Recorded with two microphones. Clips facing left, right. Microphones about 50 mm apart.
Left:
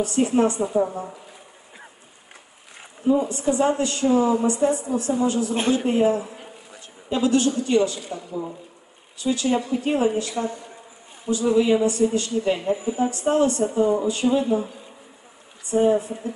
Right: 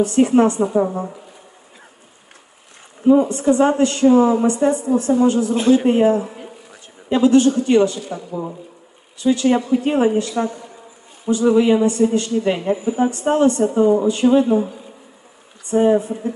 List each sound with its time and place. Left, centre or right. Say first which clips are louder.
0.0 s speech: right 6 dB; right
3.1 s a man's voice: right 7 dB; right
9.2 s a man's voice: right 6 dB; right
11.4 s speech: right 5 dB; right
11.7 s a man's voice: right 4 dB; right
15.7 s speech: right 4 dB; right